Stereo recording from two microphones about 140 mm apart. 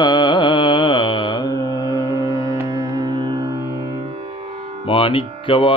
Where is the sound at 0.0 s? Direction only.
35° left (ahead or behind).